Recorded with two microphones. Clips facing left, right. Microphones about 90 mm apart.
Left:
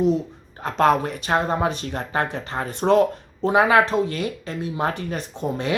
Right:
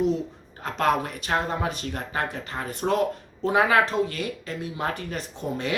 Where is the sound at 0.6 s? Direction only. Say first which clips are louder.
Left 5 dB; 25° left (ahead or behind).